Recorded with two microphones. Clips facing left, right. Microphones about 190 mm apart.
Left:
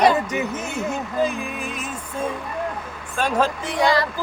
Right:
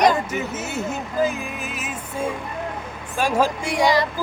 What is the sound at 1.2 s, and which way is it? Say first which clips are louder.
Music: right 1 dB; 5° right (ahead or behind).